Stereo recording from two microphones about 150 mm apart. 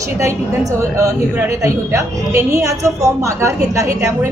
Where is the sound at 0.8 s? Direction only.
20° right (ahead or behind).